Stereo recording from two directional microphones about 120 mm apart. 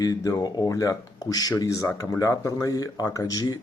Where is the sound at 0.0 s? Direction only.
30° left (ahead or behind).